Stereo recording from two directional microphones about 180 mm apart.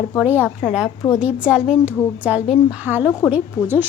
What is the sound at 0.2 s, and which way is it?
A woman's voice, 10° right (ahead or behind).